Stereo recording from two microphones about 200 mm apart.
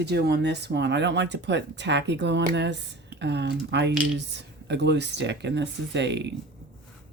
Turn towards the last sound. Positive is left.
turn(degrees=-60)  # may be behind; listen again after turning